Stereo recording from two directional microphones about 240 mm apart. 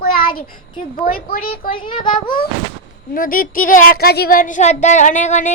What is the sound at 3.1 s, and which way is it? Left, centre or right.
Speech, left.